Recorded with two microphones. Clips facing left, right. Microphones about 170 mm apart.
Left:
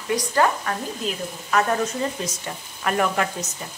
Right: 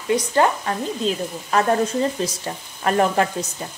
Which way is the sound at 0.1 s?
25° right (ahead or behind).